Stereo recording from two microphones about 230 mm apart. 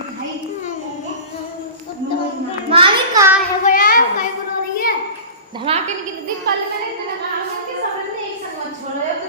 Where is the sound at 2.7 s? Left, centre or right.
Right.